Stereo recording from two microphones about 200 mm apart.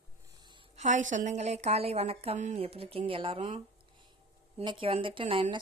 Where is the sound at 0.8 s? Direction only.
40° right (ahead or behind).